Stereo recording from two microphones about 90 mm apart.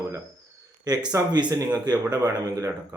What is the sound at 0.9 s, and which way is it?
Speech, 50° right (ahead or behind).